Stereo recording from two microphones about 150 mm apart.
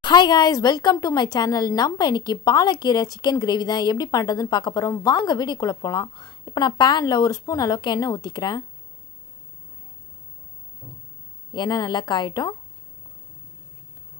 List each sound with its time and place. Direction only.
0.0 s a woman's voice: 30° left (ahead or behind)
11.5 s a woman's voice: 25° left (ahead or behind)